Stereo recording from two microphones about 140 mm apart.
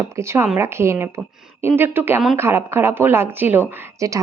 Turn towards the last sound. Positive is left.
turn(degrees=-20)  # may be behind; listen again after turning